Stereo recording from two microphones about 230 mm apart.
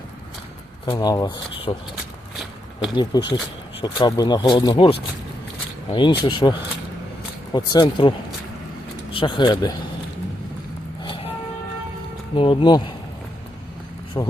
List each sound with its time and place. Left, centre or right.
0.9 s speech: centre
2.3 s a sound: centre
2.9 s speech: centre
9.1 s speech: left
11.0 s vehicle: left
12.4 s speech: left
14.2 s speech: centre